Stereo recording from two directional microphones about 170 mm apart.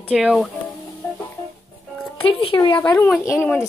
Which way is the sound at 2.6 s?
10° left (ahead or behind).